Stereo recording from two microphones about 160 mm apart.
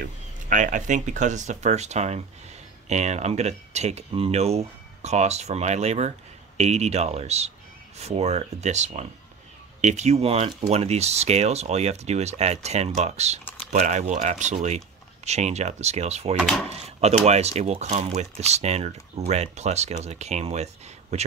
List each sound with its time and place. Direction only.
0.5 s speech: 55° right (ahead or behind)
16.3 s speech: centre (ahead or behind)
16.6 s speech: 40° right (ahead or behind)